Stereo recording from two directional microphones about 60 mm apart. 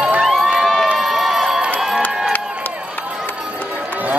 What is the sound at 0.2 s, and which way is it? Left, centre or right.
Crowd, centre.